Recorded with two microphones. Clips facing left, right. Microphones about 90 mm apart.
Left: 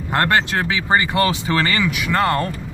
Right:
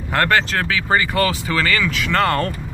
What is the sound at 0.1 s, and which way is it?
Speech, 20° left (ahead or behind).